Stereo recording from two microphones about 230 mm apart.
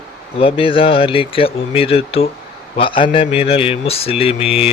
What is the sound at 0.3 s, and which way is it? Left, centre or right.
Mantra, left.